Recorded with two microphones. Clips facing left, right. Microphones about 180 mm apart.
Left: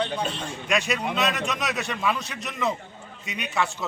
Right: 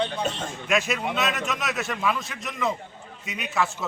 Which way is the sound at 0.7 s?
Centre (ahead or behind).